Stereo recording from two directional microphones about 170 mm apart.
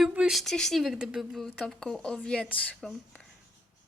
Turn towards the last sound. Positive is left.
turn(degrees=5)  # may be behind; listen again after turning